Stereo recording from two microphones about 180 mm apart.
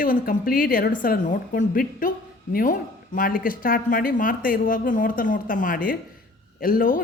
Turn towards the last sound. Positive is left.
turn(degrees=50)  # may be behind; listen again after turning